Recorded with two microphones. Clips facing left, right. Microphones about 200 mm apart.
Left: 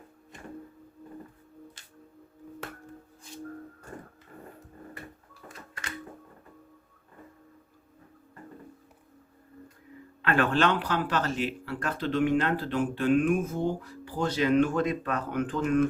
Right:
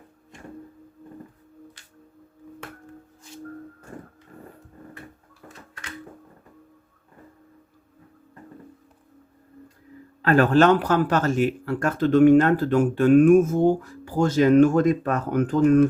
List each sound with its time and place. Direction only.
10.2 s speech: 40° right (ahead or behind)